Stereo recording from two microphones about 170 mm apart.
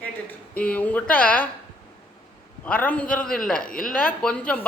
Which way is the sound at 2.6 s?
5° left (ahead or behind).